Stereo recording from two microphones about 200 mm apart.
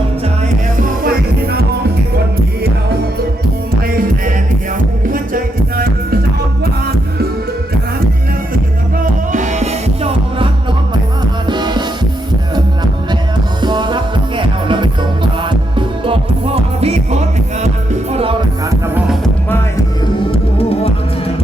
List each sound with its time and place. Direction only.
0.8 s music: 50° right (ahead or behind)
5.1 s music: 45° right (ahead or behind)
9.3 s music: 35° right (ahead or behind)
18.9 s music: 5° right (ahead or behind)
20.3 s music: 30° left (ahead or behind)